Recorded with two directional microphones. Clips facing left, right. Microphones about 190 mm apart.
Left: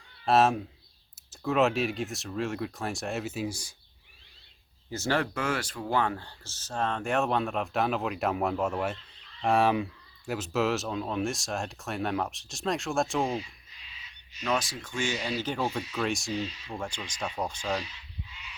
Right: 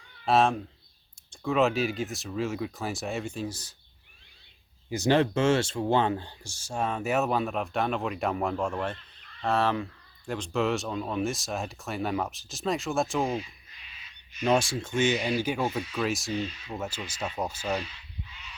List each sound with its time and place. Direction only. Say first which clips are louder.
0.3 s speech: even; centre (ahead or behind)
4.9 s speech: right 6 dB; 15° right (ahead or behind); by 13.4 s centre (ahead or behind)
14.4 s speech: right 5 dB; 30° right (ahead or behind)
15.4 s speech: right 2 dB; 10° right (ahead or behind)